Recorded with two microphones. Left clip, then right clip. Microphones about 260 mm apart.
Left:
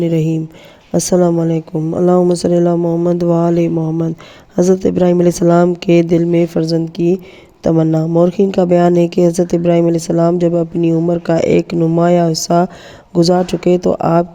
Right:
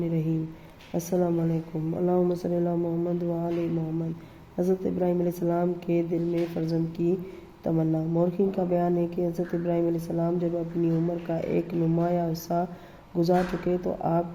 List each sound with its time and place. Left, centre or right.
0.0 s speech: left
4.5 s speech: left